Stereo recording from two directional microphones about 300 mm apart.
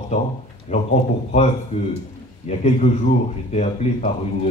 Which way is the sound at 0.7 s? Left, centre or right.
Left.